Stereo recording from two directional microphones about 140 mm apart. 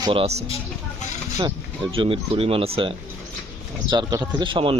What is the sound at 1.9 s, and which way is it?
Speech, 40° right (ahead or behind).